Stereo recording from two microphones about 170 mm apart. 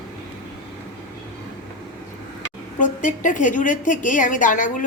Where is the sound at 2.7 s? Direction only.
50° left (ahead or behind).